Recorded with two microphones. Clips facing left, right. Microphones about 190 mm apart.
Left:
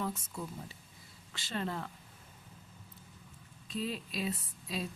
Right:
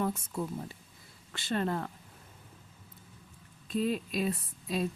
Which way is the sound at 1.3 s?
55° right (ahead or behind).